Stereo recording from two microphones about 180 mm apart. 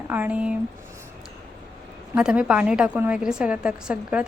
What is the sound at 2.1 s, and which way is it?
A woman's voice, 5° right (ahead or behind).